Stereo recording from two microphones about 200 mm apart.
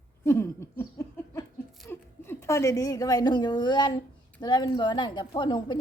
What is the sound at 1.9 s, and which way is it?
A woman's voice, 10° left (ahead or behind).